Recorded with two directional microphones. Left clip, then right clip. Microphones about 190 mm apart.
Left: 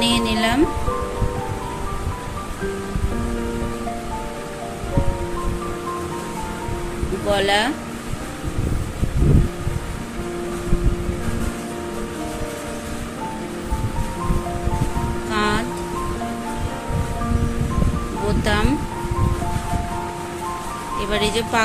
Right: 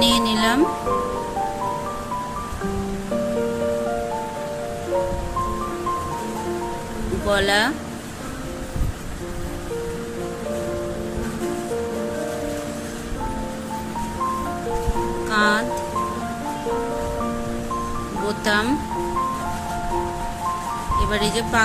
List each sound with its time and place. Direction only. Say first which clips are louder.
0.0 s music: right 1 dB; 35° right (ahead or behind)
7.2 s speech: left 1 dB; 35° right (ahead or behind)
15.3 s music: right 3 dB; 35° right (ahead or behind)
18.4 s speech: right 2 dB; 35° right (ahead or behind)
21.1 s speech: left 5 dB; 25° right (ahead or behind)